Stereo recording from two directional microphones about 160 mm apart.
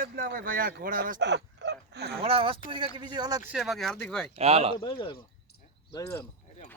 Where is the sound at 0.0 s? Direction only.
60° right (ahead or behind); by 2.2 s 90° right.